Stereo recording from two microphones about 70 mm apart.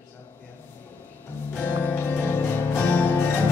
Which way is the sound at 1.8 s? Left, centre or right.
Left.